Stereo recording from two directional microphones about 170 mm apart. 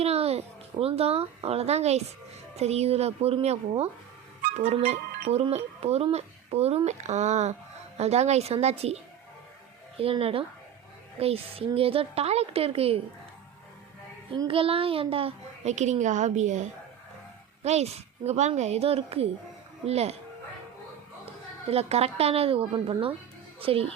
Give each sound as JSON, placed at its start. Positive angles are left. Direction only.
{"t": 0.0, "sound": "speech", "side_deg": -35}
{"t": 10.0, "sound": "speech", "side_deg": -35}
{"t": 14.3, "sound": "speech", "side_deg": -30}
{"t": 21.7, "sound": "speech", "side_deg": -35}